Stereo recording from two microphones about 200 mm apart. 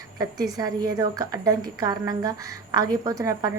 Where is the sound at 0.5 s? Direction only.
20° right (ahead or behind).